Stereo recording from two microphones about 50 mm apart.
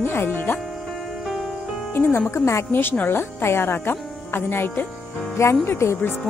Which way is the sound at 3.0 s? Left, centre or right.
Left.